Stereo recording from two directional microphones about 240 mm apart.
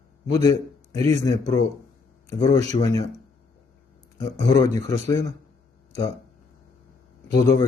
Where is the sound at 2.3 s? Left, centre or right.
Left.